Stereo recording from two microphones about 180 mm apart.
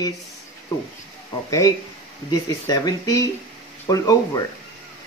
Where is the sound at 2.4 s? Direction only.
20° left (ahead or behind).